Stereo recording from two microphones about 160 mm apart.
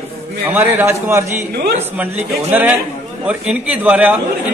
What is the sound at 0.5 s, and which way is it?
Speech, 10° right (ahead or behind).